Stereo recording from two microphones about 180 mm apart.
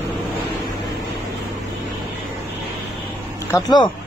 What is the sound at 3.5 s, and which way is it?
Speech, 20° left (ahead or behind).